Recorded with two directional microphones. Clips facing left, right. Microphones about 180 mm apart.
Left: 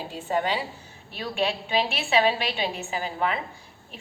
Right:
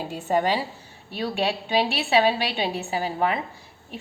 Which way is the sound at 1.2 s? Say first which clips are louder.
Right 2 dB; 35° right (ahead or behind).